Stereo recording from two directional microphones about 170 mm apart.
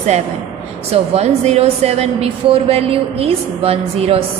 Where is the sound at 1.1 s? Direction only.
40° right (ahead or behind).